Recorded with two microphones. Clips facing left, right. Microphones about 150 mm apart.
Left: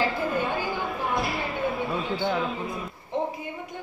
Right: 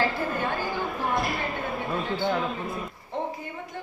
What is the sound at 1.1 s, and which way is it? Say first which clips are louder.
Basketball bounce: even; centre (ahead or behind).